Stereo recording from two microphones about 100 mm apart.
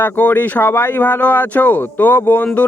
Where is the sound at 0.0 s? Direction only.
15° left (ahead or behind).